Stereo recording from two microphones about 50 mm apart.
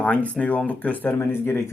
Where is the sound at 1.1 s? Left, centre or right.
Left.